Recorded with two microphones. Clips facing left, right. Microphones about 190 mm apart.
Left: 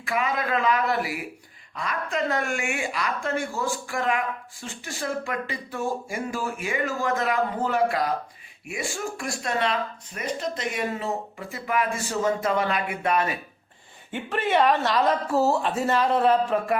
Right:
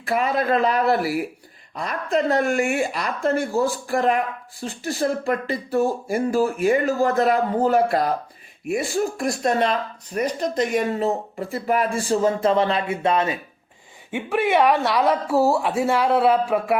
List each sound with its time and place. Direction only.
0.0 s speech: 35° right (ahead or behind)
14.1 s speech: 10° right (ahead or behind)